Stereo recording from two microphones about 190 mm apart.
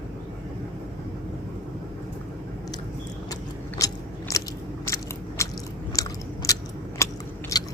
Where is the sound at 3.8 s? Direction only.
15° left (ahead or behind).